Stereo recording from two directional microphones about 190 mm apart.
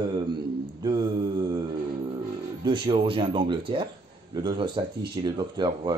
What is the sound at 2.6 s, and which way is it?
Speech, 25° right (ahead or behind).